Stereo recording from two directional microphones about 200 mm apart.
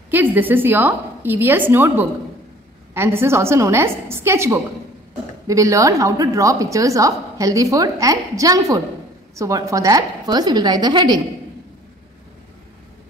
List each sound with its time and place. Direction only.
0.1 s a woman's voice: 10° right (ahead or behind)